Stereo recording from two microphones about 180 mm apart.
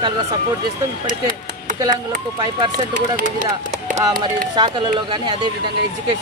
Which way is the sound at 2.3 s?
25° right (ahead or behind).